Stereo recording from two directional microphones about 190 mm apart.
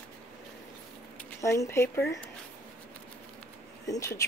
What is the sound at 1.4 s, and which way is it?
Speech, 15° left (ahead or behind).